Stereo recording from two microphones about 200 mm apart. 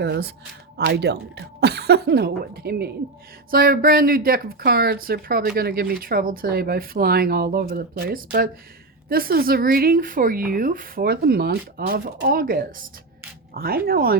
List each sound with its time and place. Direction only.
0.0 s speech: 55° right (ahead or behind)